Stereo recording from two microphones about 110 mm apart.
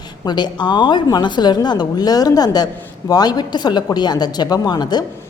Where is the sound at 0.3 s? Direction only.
40° left (ahead or behind).